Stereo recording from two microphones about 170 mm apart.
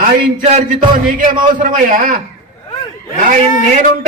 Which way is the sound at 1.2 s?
50° right (ahead or behind).